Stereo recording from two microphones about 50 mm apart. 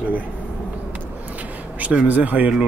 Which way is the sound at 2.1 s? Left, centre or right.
Right.